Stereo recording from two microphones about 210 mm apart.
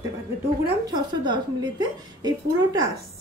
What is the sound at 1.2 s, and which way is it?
A woman's voice, 20° right (ahead or behind).